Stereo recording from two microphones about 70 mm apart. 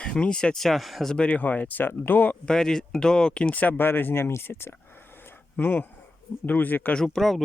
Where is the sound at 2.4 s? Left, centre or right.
Centre; by 6.9 s left.